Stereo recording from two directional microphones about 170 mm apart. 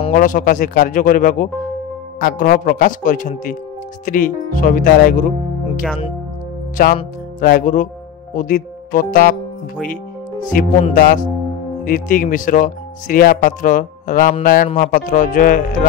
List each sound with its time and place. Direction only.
0.1 s speech: 50° left (ahead or behind)
6.8 s music: 60° left (ahead or behind)
7.3 s speech: 55° left (ahead or behind)
10.5 s music: 55° left (ahead or behind)
11.8 s speech: 55° left (ahead or behind)